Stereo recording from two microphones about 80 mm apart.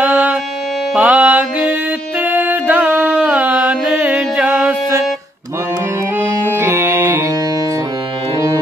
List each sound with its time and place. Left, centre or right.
0.0 s music: centre
6.1 s music: right